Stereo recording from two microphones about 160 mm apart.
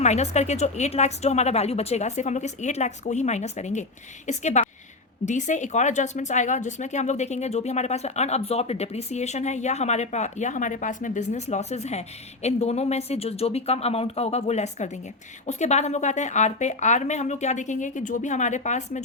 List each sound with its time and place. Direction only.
0.0 s speech: 45° left (ahead or behind)